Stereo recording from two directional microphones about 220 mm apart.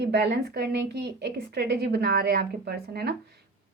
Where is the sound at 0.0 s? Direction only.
50° right (ahead or behind).